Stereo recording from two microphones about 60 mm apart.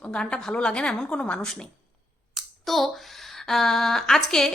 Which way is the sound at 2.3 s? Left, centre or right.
Centre.